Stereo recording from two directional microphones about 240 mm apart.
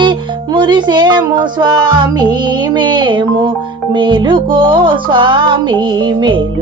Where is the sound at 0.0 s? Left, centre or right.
Centre.